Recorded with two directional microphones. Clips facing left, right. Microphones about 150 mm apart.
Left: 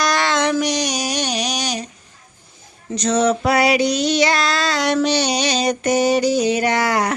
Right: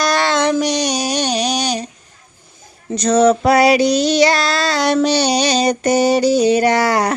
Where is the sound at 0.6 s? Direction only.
30° right (ahead or behind).